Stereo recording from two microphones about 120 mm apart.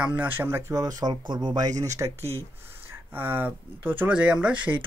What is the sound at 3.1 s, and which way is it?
Speech, 15° right (ahead or behind).